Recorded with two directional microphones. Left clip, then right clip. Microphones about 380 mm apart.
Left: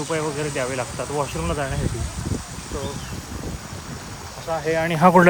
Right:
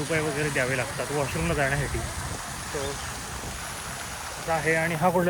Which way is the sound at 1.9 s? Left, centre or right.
Right.